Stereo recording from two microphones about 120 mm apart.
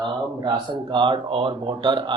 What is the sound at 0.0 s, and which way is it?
Speech, 40° right (ahead or behind).